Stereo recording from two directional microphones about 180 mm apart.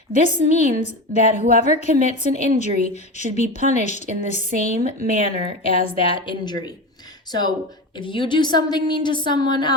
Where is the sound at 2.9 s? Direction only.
40° left (ahead or behind).